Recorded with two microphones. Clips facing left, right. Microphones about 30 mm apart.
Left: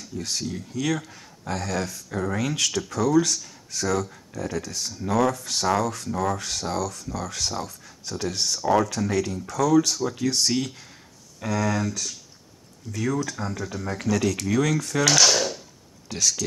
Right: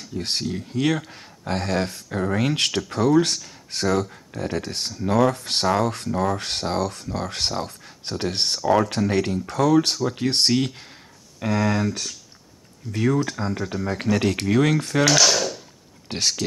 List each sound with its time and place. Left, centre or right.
0.0 s speech: right
6.0 s speech: right
6.3 s speech: right
15.0 s a sound: centre
16.1 s speech: right